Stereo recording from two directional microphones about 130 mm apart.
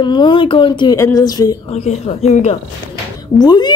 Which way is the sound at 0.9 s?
25° left (ahead or behind).